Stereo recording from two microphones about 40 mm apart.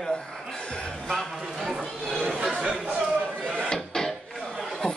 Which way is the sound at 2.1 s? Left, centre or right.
Centre.